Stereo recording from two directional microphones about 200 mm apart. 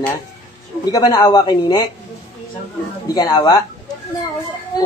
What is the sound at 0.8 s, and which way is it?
Speech, 20° left (ahead or behind).